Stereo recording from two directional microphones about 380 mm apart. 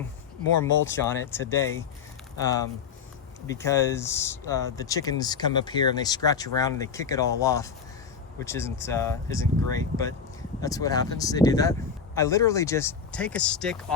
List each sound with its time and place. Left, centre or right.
0.9 s speech: centre
3.5 s speech: centre